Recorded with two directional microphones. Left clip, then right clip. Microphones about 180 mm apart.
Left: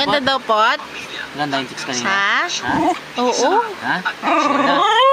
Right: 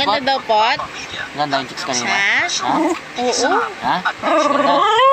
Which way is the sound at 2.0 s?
35° left (ahead or behind).